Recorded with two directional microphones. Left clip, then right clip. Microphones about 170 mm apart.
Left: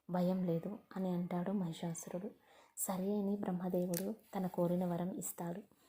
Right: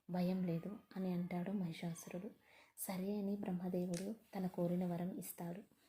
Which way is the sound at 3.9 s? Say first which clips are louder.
Left 5 dB; 40° left (ahead or behind).